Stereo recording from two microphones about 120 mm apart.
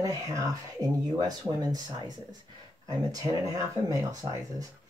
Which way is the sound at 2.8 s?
30° right (ahead or behind).